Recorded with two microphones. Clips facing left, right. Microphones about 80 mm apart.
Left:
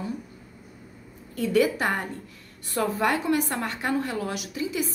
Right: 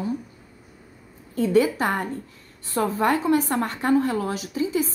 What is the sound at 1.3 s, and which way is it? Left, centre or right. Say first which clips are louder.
A woman's voice: right 3 dB; right.